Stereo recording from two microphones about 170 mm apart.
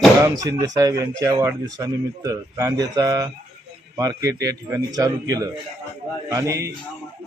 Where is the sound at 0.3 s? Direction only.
20° right (ahead or behind).